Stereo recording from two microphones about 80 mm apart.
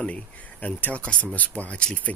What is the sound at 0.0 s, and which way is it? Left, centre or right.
Speech, centre.